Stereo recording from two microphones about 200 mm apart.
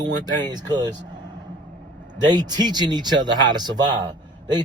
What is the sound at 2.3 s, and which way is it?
Speech, 20° right (ahead or behind).